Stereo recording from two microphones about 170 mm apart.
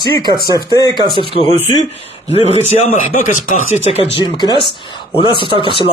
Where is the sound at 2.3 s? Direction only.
40° left (ahead or behind).